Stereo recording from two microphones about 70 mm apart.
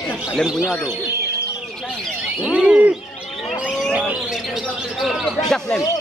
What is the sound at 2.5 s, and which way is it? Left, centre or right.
Speech, centre.